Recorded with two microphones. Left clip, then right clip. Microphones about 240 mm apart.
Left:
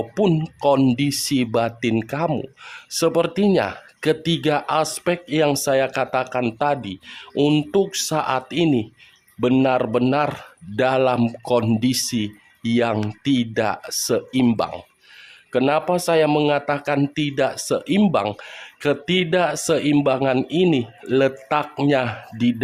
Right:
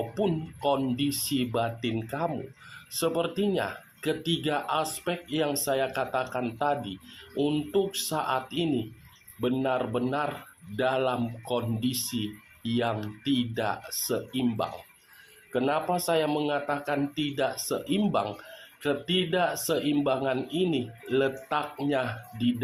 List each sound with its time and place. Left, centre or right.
0.1 s speech: left